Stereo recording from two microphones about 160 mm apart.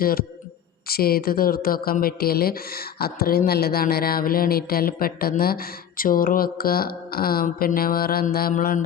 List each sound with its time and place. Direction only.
0.0 s speech: 70° left (ahead or behind)